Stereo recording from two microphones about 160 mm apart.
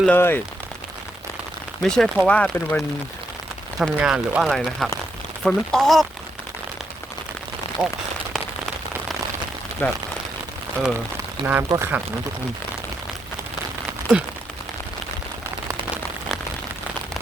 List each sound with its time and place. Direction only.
0.0 s speech: 10° left (ahead or behind)
1.8 s speech: 5° left (ahead or behind)
9.8 s speech: 10° left (ahead or behind)
11.4 s speech: 30° right (ahead or behind)
11.7 s speech: 15° right (ahead or behind)